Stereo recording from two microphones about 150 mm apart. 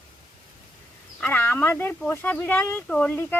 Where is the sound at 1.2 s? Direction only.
15° left (ahead or behind).